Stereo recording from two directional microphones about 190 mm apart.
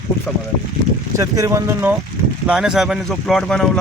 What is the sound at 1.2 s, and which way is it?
Speech, 15° right (ahead or behind).